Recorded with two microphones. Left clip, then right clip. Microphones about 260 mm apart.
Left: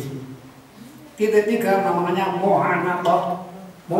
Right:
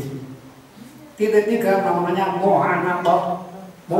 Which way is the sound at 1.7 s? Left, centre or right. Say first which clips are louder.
Left 1 dB; centre.